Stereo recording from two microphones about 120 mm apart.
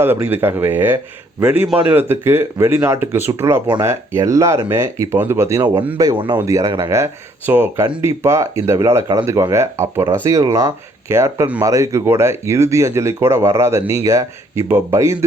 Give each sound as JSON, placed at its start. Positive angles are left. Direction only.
{"t": 0.0, "sound": "speech", "side_deg": -20}